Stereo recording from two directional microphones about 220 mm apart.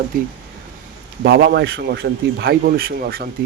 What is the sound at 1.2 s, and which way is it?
Speech, 45° right (ahead or behind).